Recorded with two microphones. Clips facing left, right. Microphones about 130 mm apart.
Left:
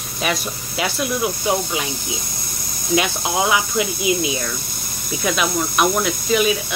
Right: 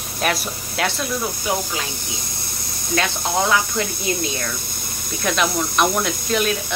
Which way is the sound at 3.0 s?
10° left (ahead or behind).